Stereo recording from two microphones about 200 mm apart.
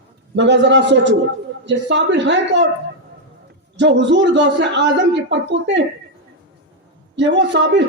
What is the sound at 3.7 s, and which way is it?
Speech, 60° right (ahead or behind).